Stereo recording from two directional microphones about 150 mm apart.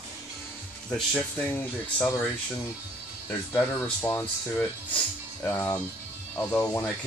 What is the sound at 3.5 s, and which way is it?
Speech, 10° left (ahead or behind).